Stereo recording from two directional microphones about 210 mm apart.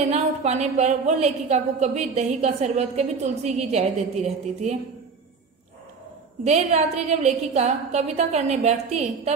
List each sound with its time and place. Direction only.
0.1 s a woman's voice: 30° right (ahead or behind)
6.4 s a woman's voice: 30° right (ahead or behind)